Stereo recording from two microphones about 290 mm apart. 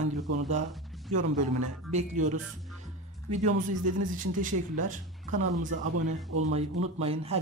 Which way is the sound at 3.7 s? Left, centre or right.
Right.